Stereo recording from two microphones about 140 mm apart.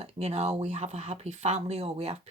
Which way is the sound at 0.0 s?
50° right (ahead or behind).